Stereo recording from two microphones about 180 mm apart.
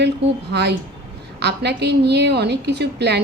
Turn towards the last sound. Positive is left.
turn(degrees=-70)  # may be behind; listen again after turning